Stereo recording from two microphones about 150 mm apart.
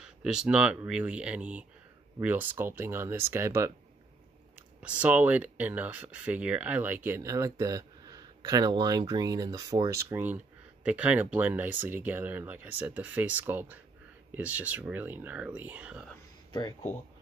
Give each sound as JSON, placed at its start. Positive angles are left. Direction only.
{"t": 0.0, "sound": "speech", "side_deg": -5}
{"t": 4.8, "sound": "speech", "side_deg": -10}